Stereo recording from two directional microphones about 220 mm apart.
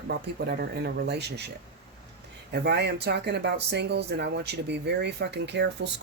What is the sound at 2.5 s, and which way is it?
Speech, 50° right (ahead or behind).